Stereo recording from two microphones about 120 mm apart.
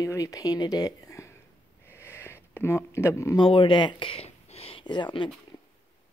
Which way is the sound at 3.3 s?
45° left (ahead or behind).